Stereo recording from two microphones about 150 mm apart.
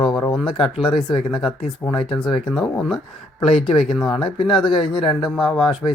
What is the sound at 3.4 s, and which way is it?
Speech, 40° left (ahead or behind).